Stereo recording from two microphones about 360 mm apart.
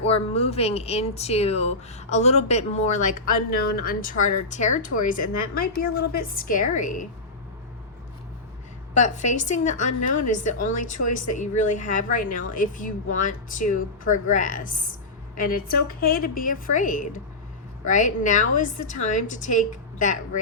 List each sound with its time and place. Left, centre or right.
0.0 s a woman's voice: centre
9.0 s a woman's voice: centre
10.0 s a woman's voice: left
10.3 s a woman's voice: left